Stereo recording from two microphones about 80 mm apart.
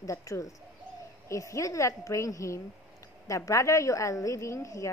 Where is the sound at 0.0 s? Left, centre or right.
Left.